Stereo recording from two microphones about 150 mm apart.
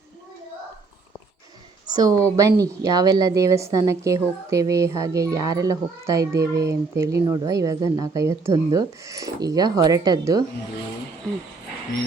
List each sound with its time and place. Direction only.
1.9 s a child's voice: 25° right (ahead or behind)